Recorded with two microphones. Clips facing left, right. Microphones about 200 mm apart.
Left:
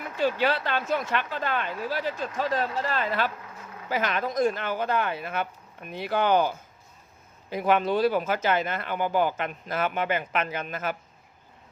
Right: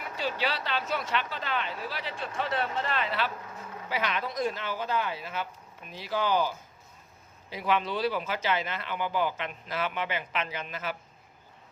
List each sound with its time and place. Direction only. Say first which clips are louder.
0.2 s speech: left 7 dB; 50° left (ahead or behind)
7.5 s speech: left 6 dB; 50° left (ahead or behind)